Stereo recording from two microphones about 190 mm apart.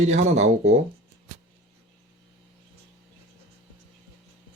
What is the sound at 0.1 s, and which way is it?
Speech, 35° right (ahead or behind).